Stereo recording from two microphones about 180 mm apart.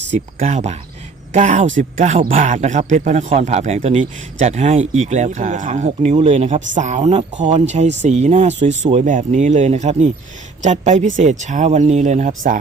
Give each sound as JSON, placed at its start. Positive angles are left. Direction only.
{"t": 0.3, "sound": "speech", "side_deg": -40}